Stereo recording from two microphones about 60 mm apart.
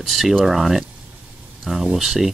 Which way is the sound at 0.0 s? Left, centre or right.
Centre.